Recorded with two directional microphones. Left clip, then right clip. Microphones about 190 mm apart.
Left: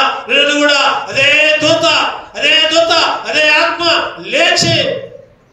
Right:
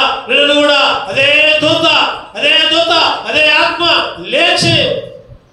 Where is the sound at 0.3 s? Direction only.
45° left (ahead or behind).